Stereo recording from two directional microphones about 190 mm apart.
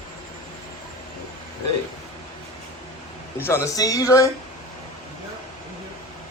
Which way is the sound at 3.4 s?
15° left (ahead or behind).